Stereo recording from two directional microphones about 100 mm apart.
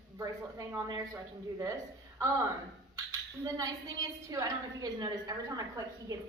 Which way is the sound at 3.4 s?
35° right (ahead or behind).